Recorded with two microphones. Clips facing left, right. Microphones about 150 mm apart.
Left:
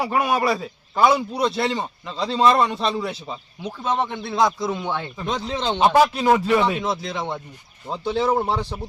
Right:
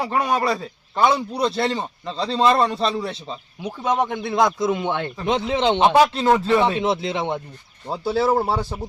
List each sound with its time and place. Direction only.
0.0 s a man's voice: 10° left (ahead or behind)
3.6 s speech: 15° right (ahead or behind)
4.2 s a man's voice: centre (ahead or behind)
4.7 s speech: 20° right (ahead or behind)
6.1 s a man's voice: 5° left (ahead or behind)
6.5 s speech: 25° right (ahead or behind)
7.9 s speech: 5° right (ahead or behind)